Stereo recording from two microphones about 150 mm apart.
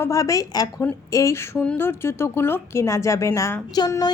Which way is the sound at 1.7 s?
15° left (ahead or behind).